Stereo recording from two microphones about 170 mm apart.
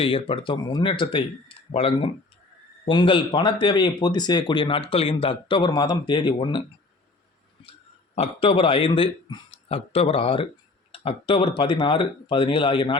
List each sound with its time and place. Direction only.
0.0 s speech: 30° left (ahead or behind)
7.6 s speech: 35° left (ahead or behind)